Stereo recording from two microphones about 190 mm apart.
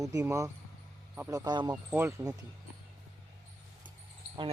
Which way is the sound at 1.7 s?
10° right (ahead or behind).